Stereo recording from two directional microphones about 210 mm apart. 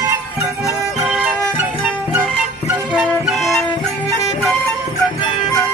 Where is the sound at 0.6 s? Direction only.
15° left (ahead or behind).